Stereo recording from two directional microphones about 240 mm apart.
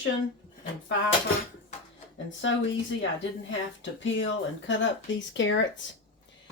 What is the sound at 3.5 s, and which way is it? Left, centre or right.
Speech, left.